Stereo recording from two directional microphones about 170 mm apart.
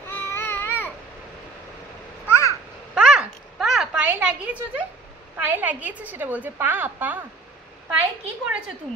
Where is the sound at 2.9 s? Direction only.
5° right (ahead or behind).